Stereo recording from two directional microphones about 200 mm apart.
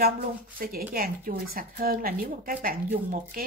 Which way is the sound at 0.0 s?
45° right (ahead or behind).